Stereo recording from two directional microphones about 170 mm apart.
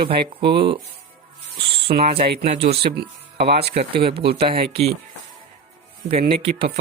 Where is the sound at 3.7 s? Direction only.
35° right (ahead or behind).